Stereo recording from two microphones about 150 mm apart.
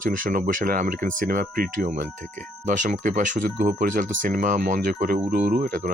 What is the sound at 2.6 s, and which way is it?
Speech, 60° right (ahead or behind).